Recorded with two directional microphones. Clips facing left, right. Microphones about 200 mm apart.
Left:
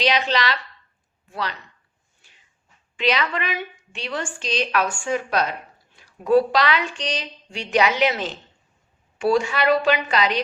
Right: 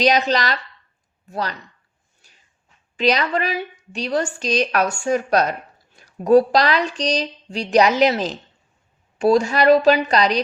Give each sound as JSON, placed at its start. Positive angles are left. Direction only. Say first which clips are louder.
{"t": 0.0, "sound": "a woman's voice", "louder": "right 4 dB", "side_deg": -45}
{"t": 2.2, "sound": "a sound", "louder": "right 1 dB", "side_deg": -40}
{"t": 2.9, "sound": "a woman's voice", "louder": "right 4 dB", "side_deg": -40}